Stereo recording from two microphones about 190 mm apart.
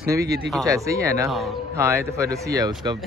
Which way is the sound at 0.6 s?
15° right (ahead or behind).